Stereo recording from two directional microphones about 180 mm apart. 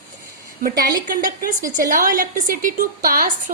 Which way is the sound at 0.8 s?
50° right (ahead or behind).